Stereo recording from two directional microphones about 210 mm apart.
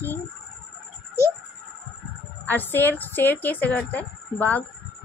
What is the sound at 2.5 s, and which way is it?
A woman's voice, 10° left (ahead or behind).